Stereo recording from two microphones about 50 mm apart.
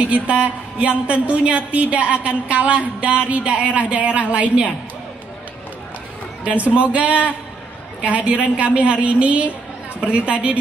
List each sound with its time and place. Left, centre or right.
0.0 s a woman's voice: right
6.4 s a woman's voice: right